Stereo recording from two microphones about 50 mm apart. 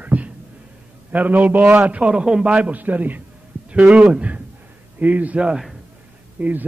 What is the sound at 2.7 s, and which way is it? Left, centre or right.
A man's voice, right.